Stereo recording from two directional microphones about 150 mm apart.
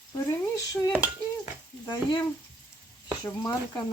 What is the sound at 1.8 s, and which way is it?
Speech, 30° left (ahead or behind).